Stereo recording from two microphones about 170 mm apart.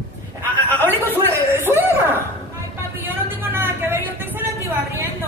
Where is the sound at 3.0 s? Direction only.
10° right (ahead or behind).